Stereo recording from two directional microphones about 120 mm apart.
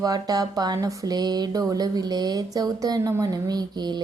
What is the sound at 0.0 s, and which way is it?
Speech, 30° right (ahead or behind).